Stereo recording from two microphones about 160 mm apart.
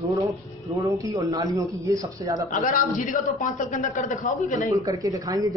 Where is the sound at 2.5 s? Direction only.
55° left (ahead or behind).